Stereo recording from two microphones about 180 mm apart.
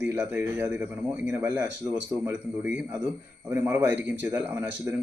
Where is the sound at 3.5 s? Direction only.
15° right (ahead or behind).